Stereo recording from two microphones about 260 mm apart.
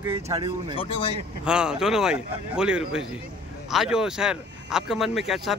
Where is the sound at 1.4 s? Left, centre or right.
Centre.